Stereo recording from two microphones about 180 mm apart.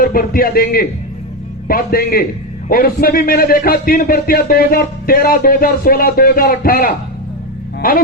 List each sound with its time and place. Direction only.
0.0 s a man's voice: 55° left (ahead or behind)